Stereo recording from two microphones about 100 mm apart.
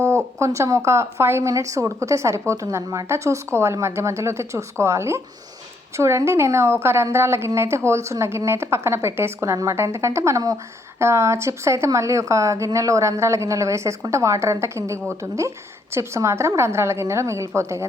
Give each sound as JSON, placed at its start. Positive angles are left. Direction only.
{"t": 0.3, "sound": "a woman's voice", "side_deg": -30}